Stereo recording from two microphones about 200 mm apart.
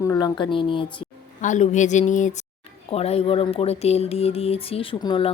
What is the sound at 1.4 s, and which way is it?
A woman's voice, 40° left (ahead or behind).